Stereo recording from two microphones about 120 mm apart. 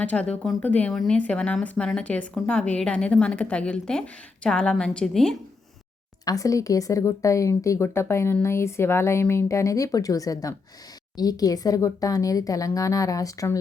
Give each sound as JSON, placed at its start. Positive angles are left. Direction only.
{"t": 0.0, "sound": "a woman's voice", "side_deg": 10}
{"t": 6.2, "sound": "speech", "side_deg": 30}